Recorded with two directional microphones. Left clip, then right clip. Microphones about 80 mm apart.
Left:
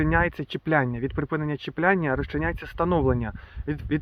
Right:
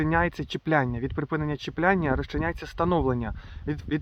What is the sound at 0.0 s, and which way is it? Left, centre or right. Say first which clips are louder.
Speech: left 1 dB; right.